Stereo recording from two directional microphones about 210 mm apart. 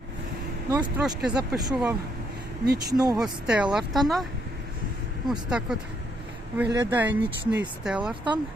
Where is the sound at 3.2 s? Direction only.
5° right (ahead or behind).